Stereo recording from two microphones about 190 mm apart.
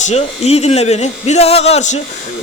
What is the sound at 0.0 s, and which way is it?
A man's voice, 35° left (ahead or behind).